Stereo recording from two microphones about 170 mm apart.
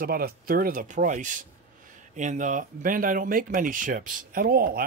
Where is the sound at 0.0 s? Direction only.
60° right (ahead or behind).